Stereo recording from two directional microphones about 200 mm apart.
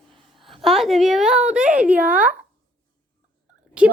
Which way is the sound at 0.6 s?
Centre (ahead or behind).